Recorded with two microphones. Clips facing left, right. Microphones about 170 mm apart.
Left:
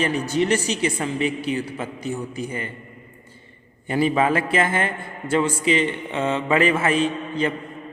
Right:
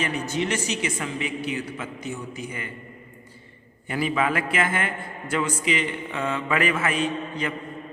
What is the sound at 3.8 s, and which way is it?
A man's voice, 30° left (ahead or behind).